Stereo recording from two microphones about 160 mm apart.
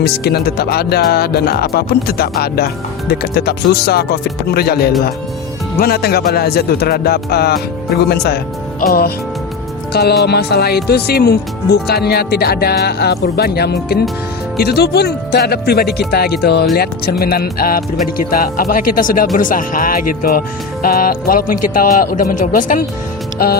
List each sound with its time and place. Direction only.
0.0 s speech: 85° left
3.1 s speech: 85° left
8.9 s speech: 75° left (ahead or behind)
9.9 s speech: 85° left
14.6 s speech: 90° left
16.7 s speech: 75° left (ahead or behind); by 22.9 s 55° left (ahead or behind)
23.4 s speech: 65° left (ahead or behind)